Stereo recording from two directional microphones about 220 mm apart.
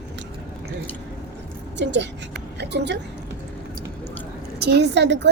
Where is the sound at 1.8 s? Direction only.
55° right (ahead or behind).